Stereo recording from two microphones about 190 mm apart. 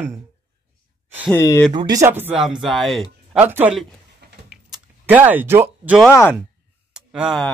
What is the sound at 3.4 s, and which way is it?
Speech, 10° right (ahead or behind).